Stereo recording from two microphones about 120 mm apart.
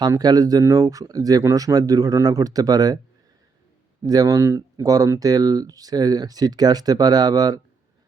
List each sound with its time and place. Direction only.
0.0 s speech: 35° right (ahead or behind)
4.0 s speech: 30° right (ahead or behind)